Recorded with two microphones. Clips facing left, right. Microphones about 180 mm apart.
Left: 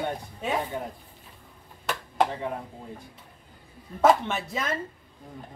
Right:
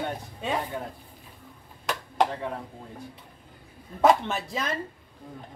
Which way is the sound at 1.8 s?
5° left (ahead or behind).